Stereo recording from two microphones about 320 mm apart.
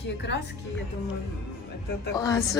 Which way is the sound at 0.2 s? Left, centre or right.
Left.